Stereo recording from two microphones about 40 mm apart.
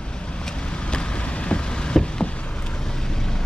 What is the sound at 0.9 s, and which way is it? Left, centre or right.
Vehicle, left.